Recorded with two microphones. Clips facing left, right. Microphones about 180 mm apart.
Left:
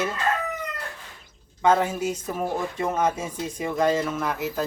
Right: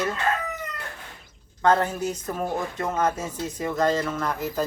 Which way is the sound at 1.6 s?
10° left (ahead or behind).